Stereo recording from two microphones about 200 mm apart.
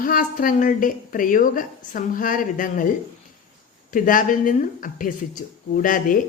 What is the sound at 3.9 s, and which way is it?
A woman's voice, 40° left (ahead or behind).